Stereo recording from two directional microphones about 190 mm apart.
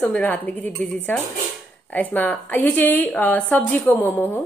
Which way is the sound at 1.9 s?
10° left (ahead or behind).